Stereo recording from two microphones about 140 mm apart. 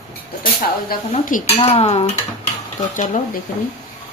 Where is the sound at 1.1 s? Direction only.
70° left (ahead or behind).